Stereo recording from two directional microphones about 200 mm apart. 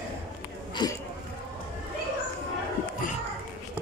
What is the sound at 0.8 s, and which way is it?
Speech, 20° left (ahead or behind).